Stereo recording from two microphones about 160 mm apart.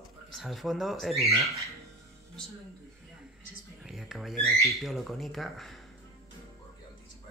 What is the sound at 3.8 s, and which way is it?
Speech, centre (ahead or behind).